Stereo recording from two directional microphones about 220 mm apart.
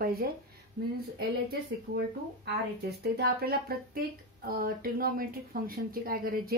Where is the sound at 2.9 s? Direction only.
45° right (ahead or behind).